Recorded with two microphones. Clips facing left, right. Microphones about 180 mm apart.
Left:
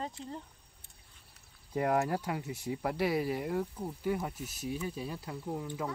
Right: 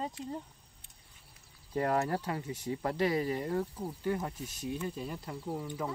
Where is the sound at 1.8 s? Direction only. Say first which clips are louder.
Left 1 dB; 10° left (ahead or behind).